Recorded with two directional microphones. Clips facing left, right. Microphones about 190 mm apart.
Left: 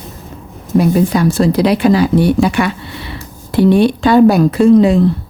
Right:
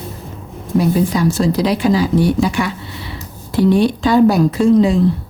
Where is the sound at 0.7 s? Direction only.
60° left (ahead or behind).